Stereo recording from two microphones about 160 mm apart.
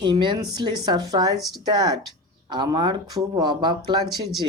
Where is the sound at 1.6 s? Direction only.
25° right (ahead or behind).